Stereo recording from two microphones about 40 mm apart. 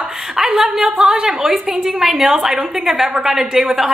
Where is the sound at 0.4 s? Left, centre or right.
Centre.